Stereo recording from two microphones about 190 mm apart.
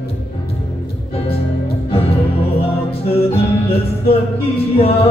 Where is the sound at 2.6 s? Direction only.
30° left (ahead or behind).